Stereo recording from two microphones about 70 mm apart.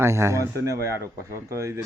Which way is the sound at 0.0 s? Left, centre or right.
Right.